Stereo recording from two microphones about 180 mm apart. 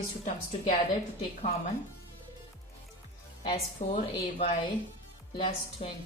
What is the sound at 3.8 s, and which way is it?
Speech, 45° left (ahead or behind).